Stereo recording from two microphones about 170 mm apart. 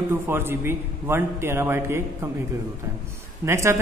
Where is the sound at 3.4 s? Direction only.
15° right (ahead or behind).